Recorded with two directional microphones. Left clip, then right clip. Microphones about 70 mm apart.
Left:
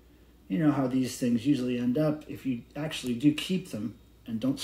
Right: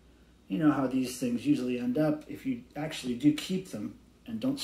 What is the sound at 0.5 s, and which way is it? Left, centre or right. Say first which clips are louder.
Speech: even; left.